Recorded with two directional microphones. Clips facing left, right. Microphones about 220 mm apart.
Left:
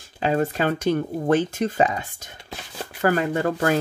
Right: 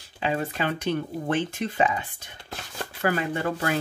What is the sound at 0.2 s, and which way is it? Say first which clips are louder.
Speech: left 5 dB; 45° left (ahead or behind).